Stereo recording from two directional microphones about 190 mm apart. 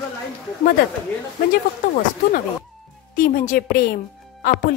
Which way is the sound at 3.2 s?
45° left (ahead or behind).